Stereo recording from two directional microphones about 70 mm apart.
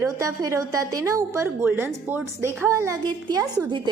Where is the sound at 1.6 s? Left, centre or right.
Right.